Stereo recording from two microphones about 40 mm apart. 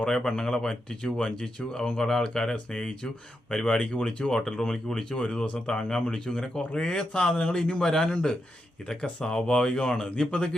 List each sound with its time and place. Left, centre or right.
0.0 s speech: centre
4.3 s speech: centre